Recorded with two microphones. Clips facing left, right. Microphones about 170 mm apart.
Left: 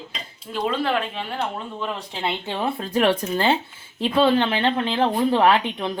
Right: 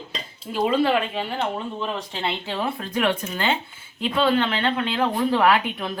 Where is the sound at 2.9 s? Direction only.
35° left (ahead or behind).